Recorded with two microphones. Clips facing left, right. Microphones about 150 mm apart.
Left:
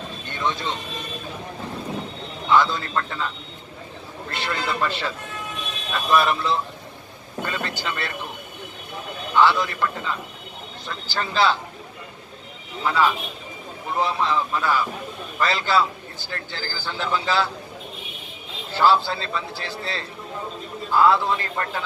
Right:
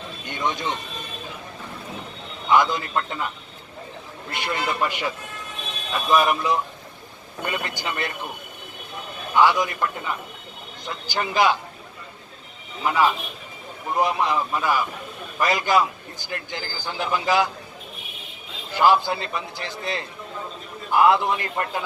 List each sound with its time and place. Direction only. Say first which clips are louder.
0.3 s a man's voice: even; 15° right (ahead or behind)
2.5 s a man's voice: even; 15° right (ahead or behind)
4.4 s a man's voice: right 1 dB; 15° right (ahead or behind)
9.3 s a man's voice: even; 15° right (ahead or behind)
12.8 s a man's voice: even; 15° right (ahead or behind)
18.7 s a man's voice: even; 15° right (ahead or behind)